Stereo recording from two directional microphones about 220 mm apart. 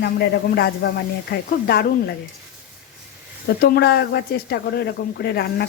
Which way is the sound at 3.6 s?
45° left (ahead or behind).